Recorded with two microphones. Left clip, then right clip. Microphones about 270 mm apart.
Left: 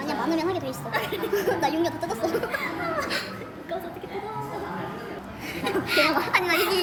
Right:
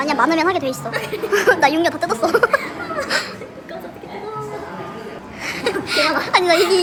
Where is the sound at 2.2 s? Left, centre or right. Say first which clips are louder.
Right 12 dB; centre.